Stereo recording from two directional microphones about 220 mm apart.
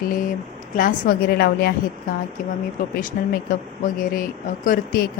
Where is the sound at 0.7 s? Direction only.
40° left (ahead or behind).